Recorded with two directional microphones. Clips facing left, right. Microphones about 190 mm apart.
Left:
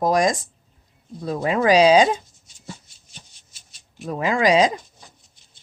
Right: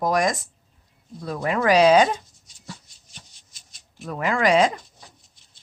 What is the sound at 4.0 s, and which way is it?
Speech, 20° left (ahead or behind).